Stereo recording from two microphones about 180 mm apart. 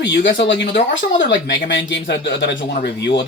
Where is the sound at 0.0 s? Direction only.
85° left.